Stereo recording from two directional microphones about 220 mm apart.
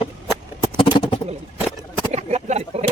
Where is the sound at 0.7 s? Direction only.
20° left (ahead or behind).